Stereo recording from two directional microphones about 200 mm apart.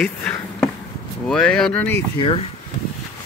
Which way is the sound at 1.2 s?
5° left (ahead or behind).